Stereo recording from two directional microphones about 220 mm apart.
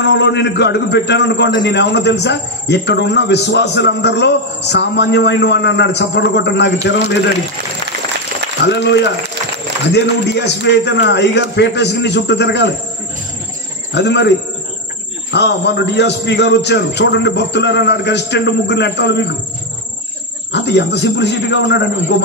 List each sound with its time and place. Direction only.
0.0 s a man's voice: 50° left (ahead or behind)
9.9 s a man's voice: 50° left (ahead or behind)
13.9 s a man's voice: 50° left (ahead or behind)
15.3 s a man's voice: 50° left (ahead or behind)
20.5 s a man's voice: 50° left (ahead or behind)